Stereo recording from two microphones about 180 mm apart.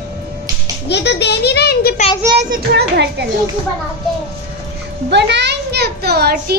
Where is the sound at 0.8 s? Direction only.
70° left (ahead or behind).